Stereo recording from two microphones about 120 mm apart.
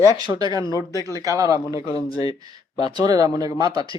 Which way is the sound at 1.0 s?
30° right (ahead or behind).